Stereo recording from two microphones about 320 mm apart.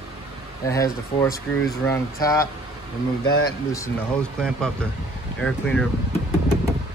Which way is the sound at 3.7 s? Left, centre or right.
Centre.